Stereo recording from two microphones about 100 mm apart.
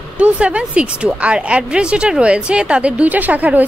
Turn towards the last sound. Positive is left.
turn(degrees=-15)  # may be behind; listen again after turning